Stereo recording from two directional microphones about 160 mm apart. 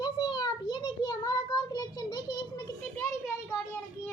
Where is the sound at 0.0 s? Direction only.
25° left (ahead or behind).